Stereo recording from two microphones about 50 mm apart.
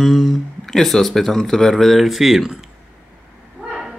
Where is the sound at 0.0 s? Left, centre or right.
Centre.